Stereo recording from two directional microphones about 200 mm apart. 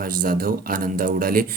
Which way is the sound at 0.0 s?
45° right (ahead or behind).